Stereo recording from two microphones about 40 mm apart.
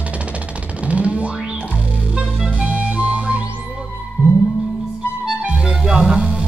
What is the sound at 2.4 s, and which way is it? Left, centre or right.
Music, right.